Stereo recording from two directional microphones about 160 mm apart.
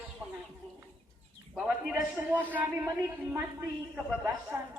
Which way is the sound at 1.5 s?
5° right (ahead or behind).